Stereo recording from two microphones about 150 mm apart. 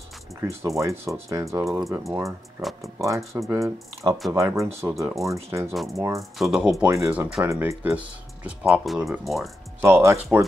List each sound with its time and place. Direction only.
0.7 s speech: 20° right (ahead or behind)
6.3 s speech: 5° right (ahead or behind)
9.8 s speech: 20° right (ahead or behind)